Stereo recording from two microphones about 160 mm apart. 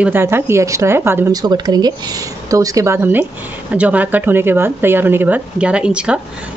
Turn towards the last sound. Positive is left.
turn(degrees=-5)  # may be behind; listen again after turning